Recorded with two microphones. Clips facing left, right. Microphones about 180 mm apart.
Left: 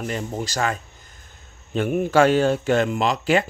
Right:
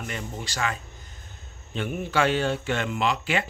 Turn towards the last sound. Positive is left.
turn(degrees=40)  # may be behind; listen again after turning